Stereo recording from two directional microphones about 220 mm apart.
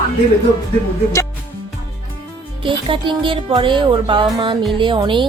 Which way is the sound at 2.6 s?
25° right (ahead or behind).